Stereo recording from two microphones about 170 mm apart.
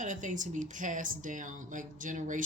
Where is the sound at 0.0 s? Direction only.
50° right (ahead or behind).